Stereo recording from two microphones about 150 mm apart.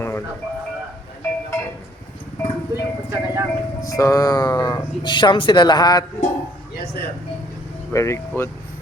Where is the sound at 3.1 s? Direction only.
15° right (ahead or behind).